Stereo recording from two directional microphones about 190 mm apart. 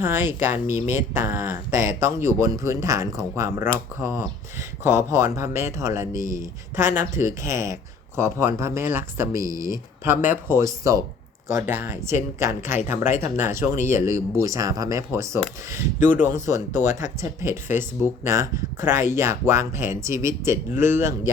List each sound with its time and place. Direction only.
0.0 s speech: 10° right (ahead or behind)
0.7 s speech: 40° left (ahead or behind)
1.1 s speech: 10° right (ahead or behind)